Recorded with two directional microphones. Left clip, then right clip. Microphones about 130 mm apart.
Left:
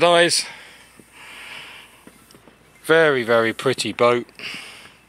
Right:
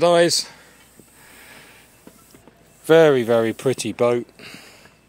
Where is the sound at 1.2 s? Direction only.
40° right (ahead or behind).